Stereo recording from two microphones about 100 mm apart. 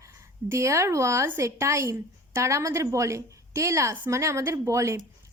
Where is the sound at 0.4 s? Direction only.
25° right (ahead or behind).